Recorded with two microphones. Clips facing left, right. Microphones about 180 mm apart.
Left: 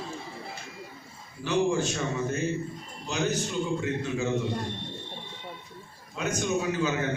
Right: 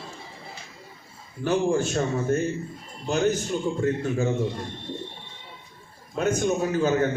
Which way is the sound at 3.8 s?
50° right (ahead or behind).